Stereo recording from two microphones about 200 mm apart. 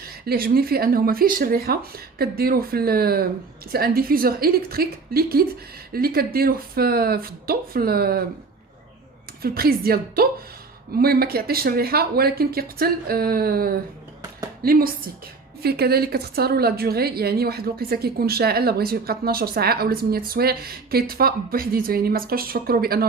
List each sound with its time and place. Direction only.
0.0 s a woman's voice: 50° right (ahead or behind)
9.4 s a woman's voice: 50° right (ahead or behind)